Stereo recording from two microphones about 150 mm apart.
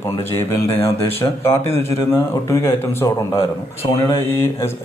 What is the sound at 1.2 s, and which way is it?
Speech, 15° left (ahead or behind).